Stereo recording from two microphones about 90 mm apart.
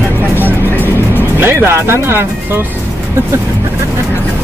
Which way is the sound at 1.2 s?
25° right (ahead or behind).